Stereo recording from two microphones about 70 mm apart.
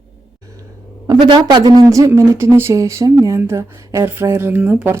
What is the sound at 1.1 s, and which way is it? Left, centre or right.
Speech, right.